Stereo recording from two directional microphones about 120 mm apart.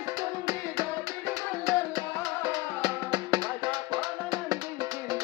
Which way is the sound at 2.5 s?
35° right (ahead or behind).